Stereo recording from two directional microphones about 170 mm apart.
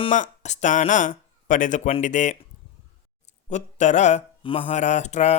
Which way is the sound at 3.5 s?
45° left (ahead or behind).